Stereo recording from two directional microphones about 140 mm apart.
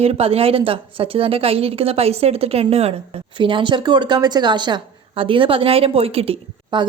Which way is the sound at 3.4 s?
35° right (ahead or behind).